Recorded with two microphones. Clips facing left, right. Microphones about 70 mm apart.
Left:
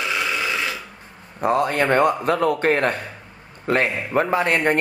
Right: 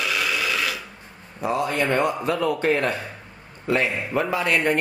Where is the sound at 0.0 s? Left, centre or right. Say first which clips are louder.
Left 1 dB; left.